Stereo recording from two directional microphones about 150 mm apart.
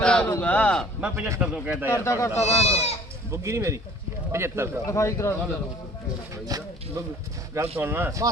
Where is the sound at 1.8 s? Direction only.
20° left (ahead or behind).